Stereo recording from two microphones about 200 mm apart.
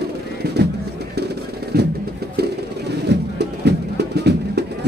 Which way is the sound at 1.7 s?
50° right (ahead or behind).